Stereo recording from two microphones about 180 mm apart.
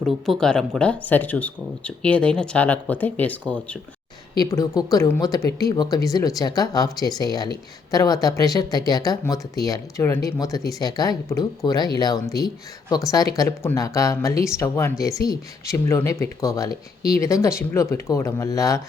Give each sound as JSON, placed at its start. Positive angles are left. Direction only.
{"t": 0.0, "sound": "speech", "side_deg": 5}
{"t": 4.4, "sound": "speech", "side_deg": 20}